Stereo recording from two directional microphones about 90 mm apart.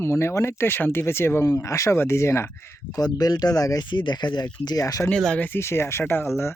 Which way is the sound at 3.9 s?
60° left (ahead or behind).